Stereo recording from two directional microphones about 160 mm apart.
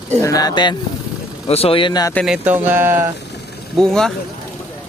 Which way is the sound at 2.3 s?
10° right (ahead or behind).